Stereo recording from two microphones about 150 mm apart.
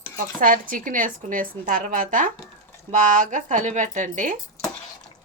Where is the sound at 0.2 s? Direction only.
65° right (ahead or behind).